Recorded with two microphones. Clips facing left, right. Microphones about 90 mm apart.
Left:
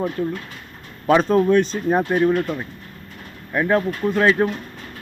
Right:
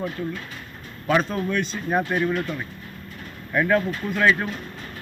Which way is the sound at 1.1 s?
40° left (ahead or behind).